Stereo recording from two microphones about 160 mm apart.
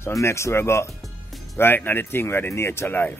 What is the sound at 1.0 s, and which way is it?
Music, centre (ahead or behind).